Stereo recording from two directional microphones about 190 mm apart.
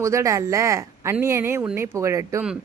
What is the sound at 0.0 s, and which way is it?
Speech, 15° right (ahead or behind).